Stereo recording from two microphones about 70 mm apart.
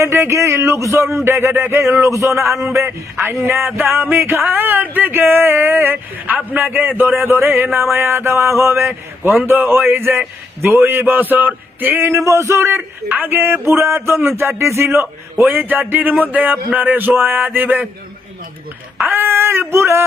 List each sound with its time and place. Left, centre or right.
0.0 s speech: right
2.8 s speech: right
12.2 s speech: right
13.1 s speech: right
19.0 s speech: right